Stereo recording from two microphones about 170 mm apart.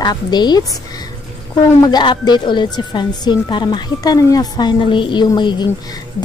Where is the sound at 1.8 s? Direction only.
25° left (ahead or behind).